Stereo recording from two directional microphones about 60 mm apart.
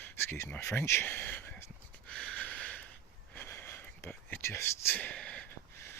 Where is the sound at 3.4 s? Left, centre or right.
Left.